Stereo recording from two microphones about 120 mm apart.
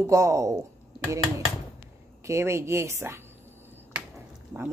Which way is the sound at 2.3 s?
25° right (ahead or behind).